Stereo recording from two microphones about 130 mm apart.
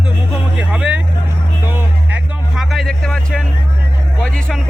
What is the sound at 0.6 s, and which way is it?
Vehicle, 5° right (ahead or behind).